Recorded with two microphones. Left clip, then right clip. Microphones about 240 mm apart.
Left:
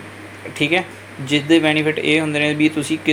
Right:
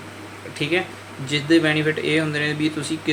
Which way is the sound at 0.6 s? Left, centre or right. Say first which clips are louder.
Left 4 dB; centre.